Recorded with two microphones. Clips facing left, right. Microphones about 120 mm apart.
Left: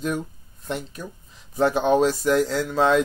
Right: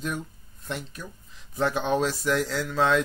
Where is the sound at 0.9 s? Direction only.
5° left (ahead or behind).